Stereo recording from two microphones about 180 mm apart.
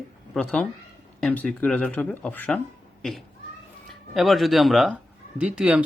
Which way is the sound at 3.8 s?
Centre (ahead or behind).